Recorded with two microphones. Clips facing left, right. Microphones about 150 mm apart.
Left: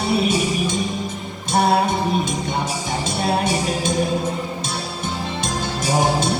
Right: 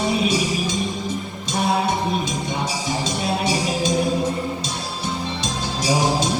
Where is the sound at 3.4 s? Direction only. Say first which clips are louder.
Even; 55° left (ahead or behind).